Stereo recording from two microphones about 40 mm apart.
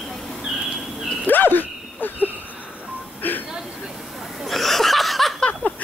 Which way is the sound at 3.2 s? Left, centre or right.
Left.